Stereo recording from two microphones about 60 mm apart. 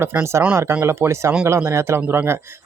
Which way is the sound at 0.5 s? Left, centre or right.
Right.